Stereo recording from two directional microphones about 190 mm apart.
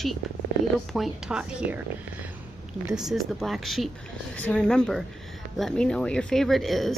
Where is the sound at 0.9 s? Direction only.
Centre (ahead or behind).